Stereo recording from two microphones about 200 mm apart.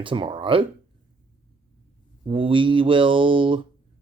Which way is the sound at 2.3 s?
25° right (ahead or behind).